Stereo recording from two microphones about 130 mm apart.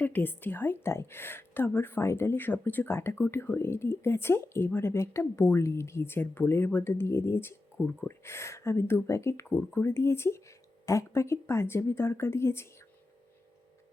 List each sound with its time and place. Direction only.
0.0 s a woman's voice: 15° left (ahead or behind)